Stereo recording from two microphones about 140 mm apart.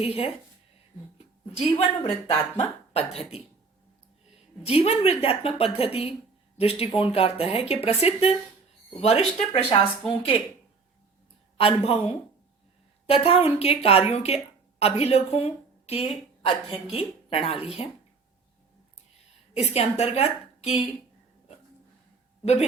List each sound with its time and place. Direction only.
0.0 s a woman's voice: 45° left (ahead or behind)
1.5 s a woman's voice: 45° left (ahead or behind)
4.6 s a woman's voice: 45° left (ahead or behind)
11.5 s a woman's voice: 45° left (ahead or behind)
19.5 s a woman's voice: 50° left (ahead or behind)